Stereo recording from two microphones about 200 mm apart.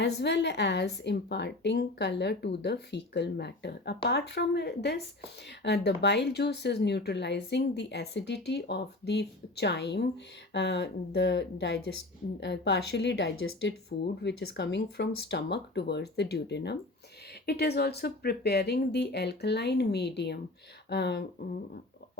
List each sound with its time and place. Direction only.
0.0 s a woman's voice: 60° left (ahead or behind)